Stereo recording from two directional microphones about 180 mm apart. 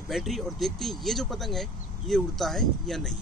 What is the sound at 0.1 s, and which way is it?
Speech, centre (ahead or behind).